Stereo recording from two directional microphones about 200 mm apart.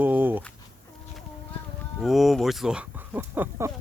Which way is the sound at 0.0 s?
10° right (ahead or behind).